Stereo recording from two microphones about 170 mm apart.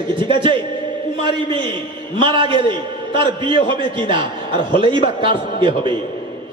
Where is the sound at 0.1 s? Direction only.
30° right (ahead or behind).